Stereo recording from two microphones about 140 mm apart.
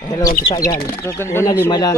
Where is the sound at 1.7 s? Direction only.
30° left (ahead or behind).